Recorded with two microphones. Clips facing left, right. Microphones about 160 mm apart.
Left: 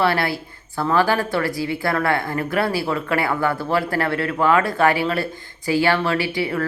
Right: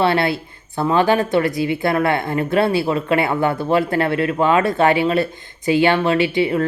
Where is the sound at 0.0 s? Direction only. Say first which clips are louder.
Right 3 dB; 25° right (ahead or behind).